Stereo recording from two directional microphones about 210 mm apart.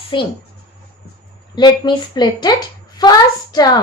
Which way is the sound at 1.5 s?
20° left (ahead or behind).